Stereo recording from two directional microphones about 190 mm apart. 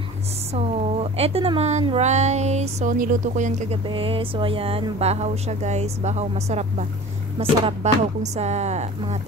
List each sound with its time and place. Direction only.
0.6 s speech: 30° right (ahead or behind)
3.9 s speech: 30° right (ahead or behind)